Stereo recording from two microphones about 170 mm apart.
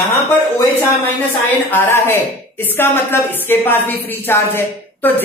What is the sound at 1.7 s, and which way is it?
A woman's voice, 15° left (ahead or behind).